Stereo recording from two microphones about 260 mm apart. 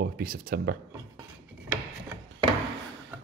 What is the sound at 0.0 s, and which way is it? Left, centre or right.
Speech, right.